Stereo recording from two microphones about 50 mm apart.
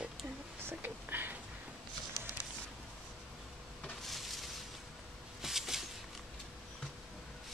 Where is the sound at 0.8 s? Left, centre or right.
Right.